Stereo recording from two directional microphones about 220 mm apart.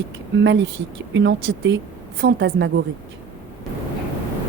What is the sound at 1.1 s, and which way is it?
A woman's voice, 55° right (ahead or behind).